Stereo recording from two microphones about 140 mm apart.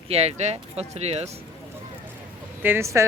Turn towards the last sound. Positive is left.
turn(degrees=-20)  # may be behind; listen again after turning